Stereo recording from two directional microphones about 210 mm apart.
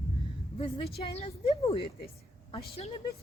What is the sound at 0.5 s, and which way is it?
A woman's voice, 25° left (ahead or behind).